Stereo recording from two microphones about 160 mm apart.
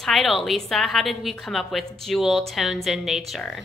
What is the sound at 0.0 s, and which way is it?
A woman's voice, centre (ahead or behind).